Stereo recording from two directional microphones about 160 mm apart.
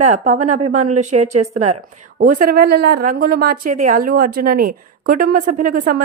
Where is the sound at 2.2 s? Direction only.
60° right (ahead or behind).